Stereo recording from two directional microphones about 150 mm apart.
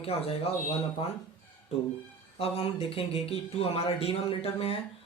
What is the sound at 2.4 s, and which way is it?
Speech, 40° left (ahead or behind).